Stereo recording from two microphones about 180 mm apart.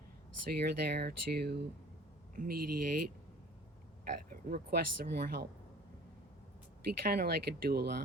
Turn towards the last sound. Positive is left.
turn(degrees=-60)  # may be behind; listen again after turning